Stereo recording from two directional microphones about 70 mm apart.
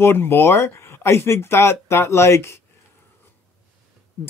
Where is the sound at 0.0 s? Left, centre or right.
Left.